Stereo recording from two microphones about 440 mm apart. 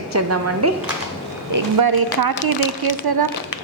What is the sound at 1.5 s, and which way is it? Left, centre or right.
Speech, right.